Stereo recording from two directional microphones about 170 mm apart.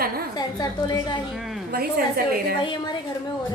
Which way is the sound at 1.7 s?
65° right (ahead or behind).